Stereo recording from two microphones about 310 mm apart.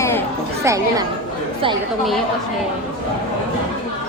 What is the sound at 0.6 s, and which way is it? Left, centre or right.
Chatter, centre.